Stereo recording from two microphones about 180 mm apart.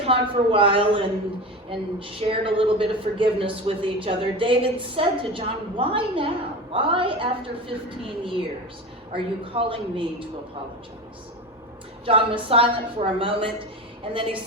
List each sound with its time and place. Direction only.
0.0 s speech: 30° right (ahead or behind)
12.0 s a woman's voice: 30° right (ahead or behind)